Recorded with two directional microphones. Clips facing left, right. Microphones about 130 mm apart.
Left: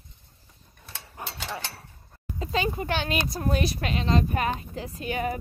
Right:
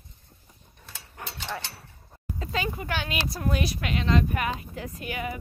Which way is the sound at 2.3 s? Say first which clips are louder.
Left 3 dB; 25° left (ahead or behind).